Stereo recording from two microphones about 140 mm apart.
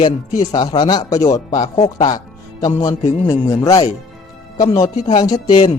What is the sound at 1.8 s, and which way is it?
Speech, 30° left (ahead or behind).